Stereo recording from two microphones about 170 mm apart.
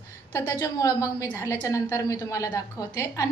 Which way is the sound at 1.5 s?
15° left (ahead or behind).